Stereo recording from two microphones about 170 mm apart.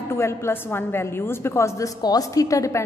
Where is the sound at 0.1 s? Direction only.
15° left (ahead or behind).